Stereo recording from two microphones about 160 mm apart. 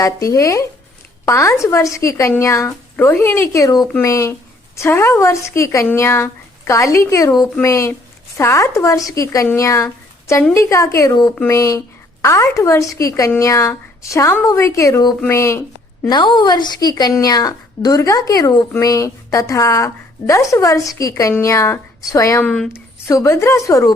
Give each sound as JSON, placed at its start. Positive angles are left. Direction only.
{"t": 0.0, "sound": "a woman's voice", "side_deg": 20}
{"t": 16.0, "sound": "speech", "side_deg": 25}
{"t": 22.4, "sound": "speech", "side_deg": 5}
{"t": 22.7, "sound": "a woman's voice", "side_deg": 20}